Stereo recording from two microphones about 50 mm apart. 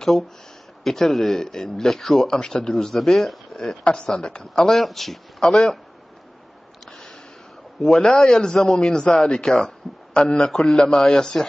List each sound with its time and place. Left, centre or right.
0.8 s a man's voice: centre
3.8 s speech: left
4.1 s a man's voice: centre
6.9 s a sound: centre
7.8 s a man's voice: centre